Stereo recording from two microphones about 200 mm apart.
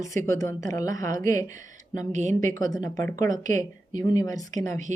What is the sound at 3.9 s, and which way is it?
Speech, 20° left (ahead or behind).